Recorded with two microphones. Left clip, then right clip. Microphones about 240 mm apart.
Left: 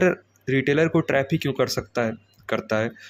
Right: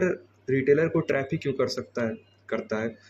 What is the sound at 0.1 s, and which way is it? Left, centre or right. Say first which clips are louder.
Speech: left 3 dB; left.